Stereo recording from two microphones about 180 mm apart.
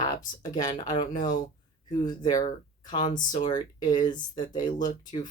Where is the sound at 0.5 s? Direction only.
25° left (ahead or behind).